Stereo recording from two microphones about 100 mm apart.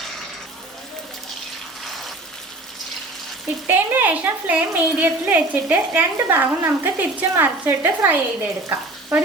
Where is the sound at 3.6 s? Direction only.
20° right (ahead or behind).